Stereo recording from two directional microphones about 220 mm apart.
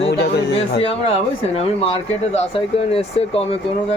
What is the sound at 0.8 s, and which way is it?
Speech, 25° left (ahead or behind).